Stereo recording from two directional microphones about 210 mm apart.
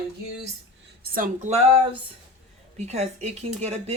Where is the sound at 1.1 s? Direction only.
35° right (ahead or behind).